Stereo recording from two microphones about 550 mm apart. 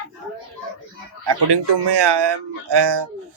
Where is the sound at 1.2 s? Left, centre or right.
Right.